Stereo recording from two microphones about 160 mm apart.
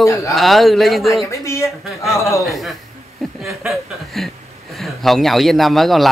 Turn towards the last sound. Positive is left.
turn(degrees=0)  # may be behind; listen again after turning